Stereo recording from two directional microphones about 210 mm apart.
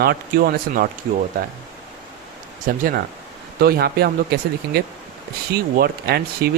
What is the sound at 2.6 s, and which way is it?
Speech, 45° right (ahead or behind).